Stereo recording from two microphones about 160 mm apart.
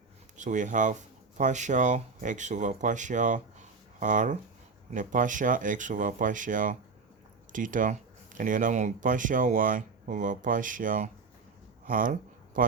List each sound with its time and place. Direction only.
0.3 s speech: 50° right (ahead or behind)